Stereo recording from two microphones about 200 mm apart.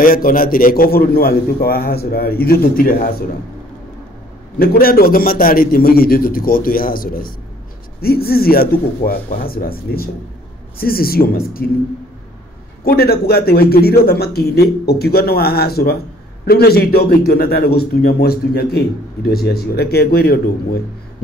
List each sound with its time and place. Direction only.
0.0 s a man's voice: 45° left (ahead or behind)
4.6 s a man's voice: 50° left (ahead or behind)
12.8 s a man's voice: 50° left (ahead or behind)